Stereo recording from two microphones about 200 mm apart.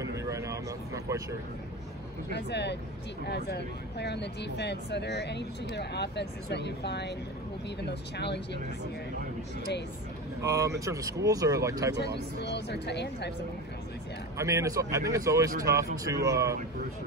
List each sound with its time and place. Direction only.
0.0 s vehicle: 15° right (ahead or behind)
2.3 s speech: 60° left (ahead or behind)
10.4 s speech: 15° right (ahead or behind)
12.0 s speech: 55° left (ahead or behind)
14.4 s speech: 15° right (ahead or behind)